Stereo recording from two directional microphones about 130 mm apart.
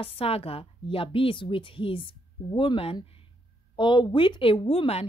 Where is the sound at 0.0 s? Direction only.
45° left (ahead or behind).